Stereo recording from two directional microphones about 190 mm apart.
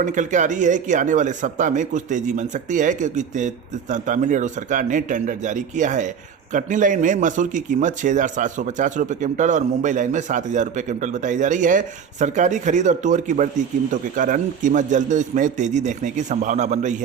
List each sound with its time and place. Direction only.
0.0 s speech: 40° right (ahead or behind)